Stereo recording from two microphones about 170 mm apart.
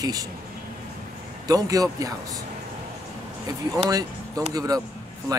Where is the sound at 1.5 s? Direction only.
20° right (ahead or behind).